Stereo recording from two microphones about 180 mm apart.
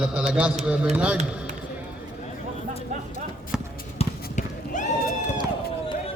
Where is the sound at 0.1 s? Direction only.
5° right (ahead or behind).